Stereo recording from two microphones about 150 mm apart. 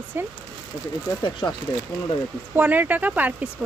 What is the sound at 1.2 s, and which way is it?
Speech, 30° left (ahead or behind).